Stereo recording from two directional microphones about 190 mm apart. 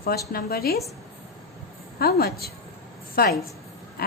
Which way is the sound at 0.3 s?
55° left (ahead or behind).